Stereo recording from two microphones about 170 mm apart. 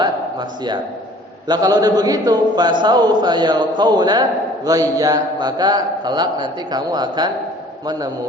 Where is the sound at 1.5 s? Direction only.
20° right (ahead or behind).